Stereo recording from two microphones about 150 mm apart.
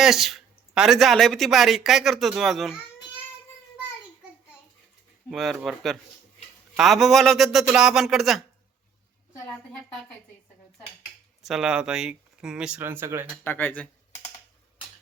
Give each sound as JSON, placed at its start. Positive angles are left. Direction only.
{"t": 0.0, "sound": "speech", "side_deg": 0}
{"t": 5.3, "sound": "speech", "side_deg": 0}
{"t": 11.4, "sound": "speech", "side_deg": -5}
{"t": 13.4, "sound": "speech", "side_deg": 15}